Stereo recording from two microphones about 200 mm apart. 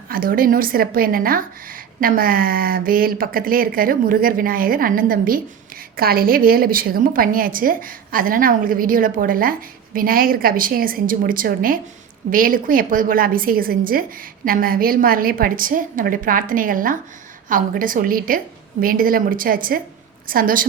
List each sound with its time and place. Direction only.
0.1 s a woman's voice: 45° right (ahead or behind)